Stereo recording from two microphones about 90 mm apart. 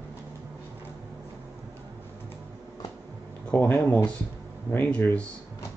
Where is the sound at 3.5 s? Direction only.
20° left (ahead or behind).